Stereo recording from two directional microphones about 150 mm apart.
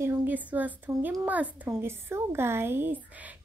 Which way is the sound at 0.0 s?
15° right (ahead or behind).